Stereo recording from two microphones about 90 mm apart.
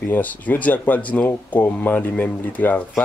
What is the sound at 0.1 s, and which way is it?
Speech, 20° left (ahead or behind).